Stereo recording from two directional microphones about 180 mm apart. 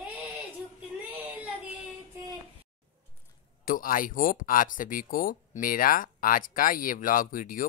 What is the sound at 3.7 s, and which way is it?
Speech, 50° left (ahead or behind).